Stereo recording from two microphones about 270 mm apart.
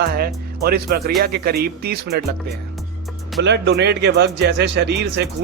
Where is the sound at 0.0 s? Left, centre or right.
Right.